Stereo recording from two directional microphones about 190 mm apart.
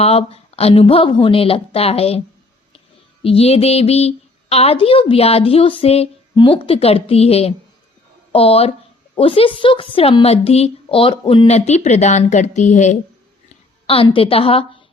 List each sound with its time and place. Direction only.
0.0 s a woman's voice: 30° left (ahead or behind)
3.2 s a woman's voice: 30° left (ahead or behind)
13.8 s a woman's voice: 30° left (ahead or behind)